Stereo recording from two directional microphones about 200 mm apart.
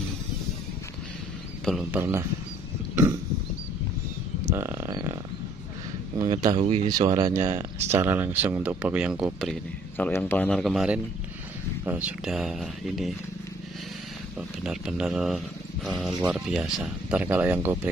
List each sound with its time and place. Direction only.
1.6 s speech: centre (ahead or behind)
1.9 s speech: 10° right (ahead or behind)
4.5 s speech: 10° right (ahead or behind)
6.1 s speech: 20° right (ahead or behind)
6.9 s speech: 20° right (ahead or behind); by 13.1 s centre (ahead or behind)
14.6 s speech: 5° right (ahead or behind)